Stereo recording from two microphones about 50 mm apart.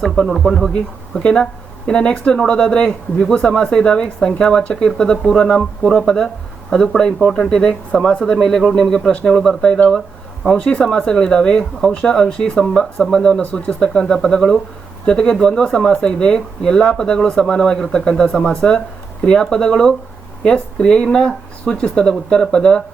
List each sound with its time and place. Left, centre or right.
0.0 s speech: centre
1.2 s speech: centre
13.4 s speech: left